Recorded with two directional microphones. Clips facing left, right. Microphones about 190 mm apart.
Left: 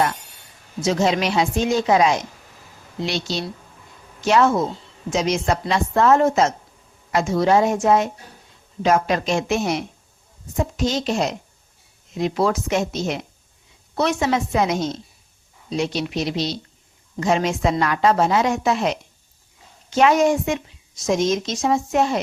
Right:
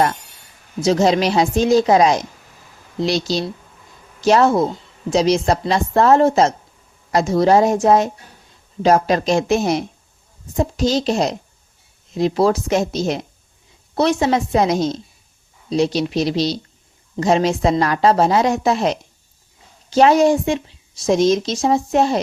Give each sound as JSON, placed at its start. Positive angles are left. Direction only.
{"t": 0.8, "sound": "a woman's voice", "side_deg": -35}